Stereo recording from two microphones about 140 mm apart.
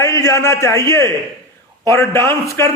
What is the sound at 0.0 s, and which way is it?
A man's voice, 20° left (ahead or behind).